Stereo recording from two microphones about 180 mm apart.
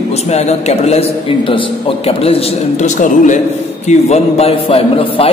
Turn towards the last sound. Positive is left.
turn(degrees=30)  # may be behind; listen again after turning